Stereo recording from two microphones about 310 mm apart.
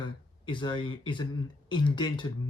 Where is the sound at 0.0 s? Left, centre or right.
Centre.